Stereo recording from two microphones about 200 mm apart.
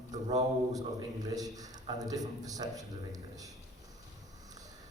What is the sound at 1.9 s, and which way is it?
Speech, 20° right (ahead or behind).